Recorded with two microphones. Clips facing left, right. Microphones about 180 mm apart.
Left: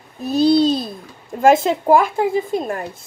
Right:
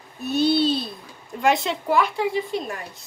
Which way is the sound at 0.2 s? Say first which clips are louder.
Left 6 dB; 35° left (ahead or behind).